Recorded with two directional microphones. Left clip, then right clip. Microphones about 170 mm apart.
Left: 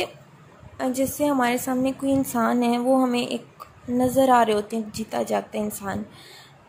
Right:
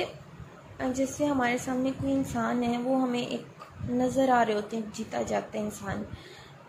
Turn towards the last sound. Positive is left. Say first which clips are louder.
# left 5 dB
turn(degrees=30)  # may be behind; listen again after turning